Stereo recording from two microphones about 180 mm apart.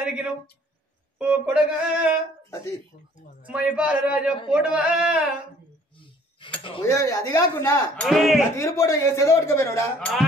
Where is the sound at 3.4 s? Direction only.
5° right (ahead or behind).